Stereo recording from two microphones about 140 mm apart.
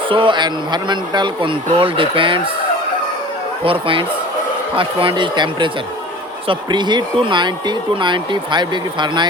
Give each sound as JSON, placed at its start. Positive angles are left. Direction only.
{"t": 0.1, "sound": "speech", "side_deg": -35}
{"t": 3.6, "sound": "speech", "side_deg": -40}